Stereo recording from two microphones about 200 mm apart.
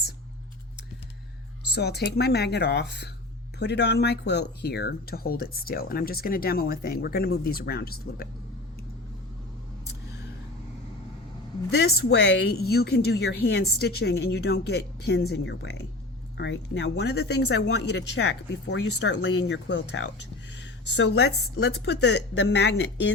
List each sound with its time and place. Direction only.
1.7 s speech: 55° left (ahead or behind)
11.7 s speech: 55° left (ahead or behind)